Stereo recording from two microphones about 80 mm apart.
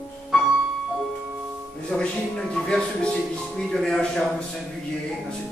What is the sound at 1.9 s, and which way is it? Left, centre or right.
A man's voice, centre.